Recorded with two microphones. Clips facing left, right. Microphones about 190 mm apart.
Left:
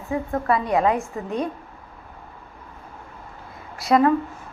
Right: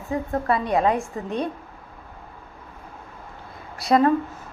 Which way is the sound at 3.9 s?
30° right (ahead or behind).